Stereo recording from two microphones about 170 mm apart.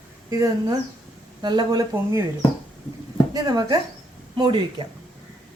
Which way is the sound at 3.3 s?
25° right (ahead or behind).